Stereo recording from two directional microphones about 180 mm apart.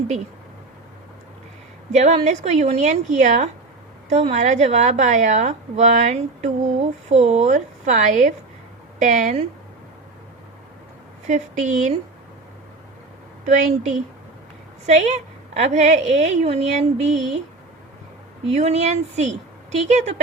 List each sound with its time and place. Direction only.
1.9 s a woman's voice: 40° right (ahead or behind)
11.3 s a woman's voice: 40° right (ahead or behind)
13.4 s a woman's voice: 40° right (ahead or behind)
18.4 s a woman's voice: 35° right (ahead or behind)